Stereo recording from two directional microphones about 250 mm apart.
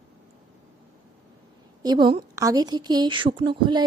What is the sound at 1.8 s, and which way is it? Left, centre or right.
A woman's voice, centre.